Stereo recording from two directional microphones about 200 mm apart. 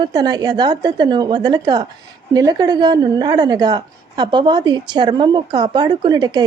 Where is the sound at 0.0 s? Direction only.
20° right (ahead or behind).